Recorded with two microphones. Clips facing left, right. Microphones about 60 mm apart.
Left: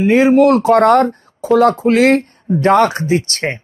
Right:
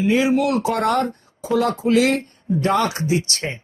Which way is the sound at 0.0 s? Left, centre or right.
Left.